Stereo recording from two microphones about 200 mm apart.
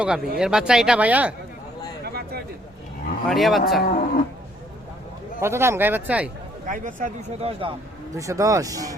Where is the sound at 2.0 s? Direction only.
50° right (ahead or behind).